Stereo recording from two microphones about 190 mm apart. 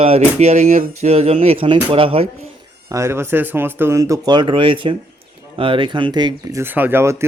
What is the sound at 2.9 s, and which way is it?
Speech, 15° right (ahead or behind).